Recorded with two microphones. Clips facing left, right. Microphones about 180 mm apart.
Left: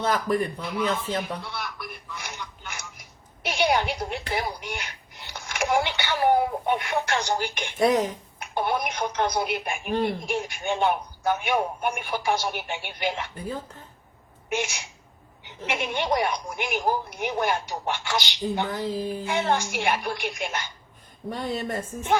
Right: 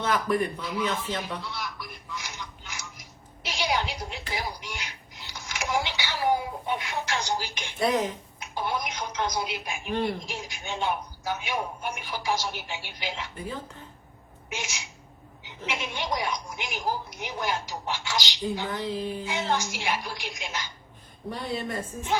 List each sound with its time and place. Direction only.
0.0 s speech: 35° left (ahead or behind)
0.6 s speech: 60° left (ahead or behind)
1.4 s a sound: 60° left (ahead or behind)
7.9 s speech: 45° left (ahead or behind)
8.5 s speech: 60° left (ahead or behind)
14.5 s speech: 60° left (ahead or behind)
18.7 s speech: 40° left (ahead or behind)
19.3 s speech: 60° left (ahead or behind)
21.2 s speech: 45° left (ahead or behind)